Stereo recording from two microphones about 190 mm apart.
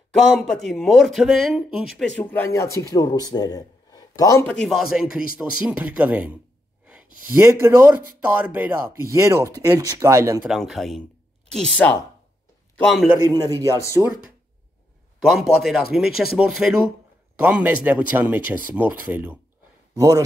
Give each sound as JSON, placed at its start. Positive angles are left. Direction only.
{"t": 0.4, "sound": "speech", "side_deg": 0}
{"t": 4.6, "sound": "speech", "side_deg": 0}
{"t": 10.4, "sound": "speech", "side_deg": 0}
{"t": 13.5, "sound": "speech", "side_deg": -15}
{"t": 15.2, "sound": "speech", "side_deg": 0}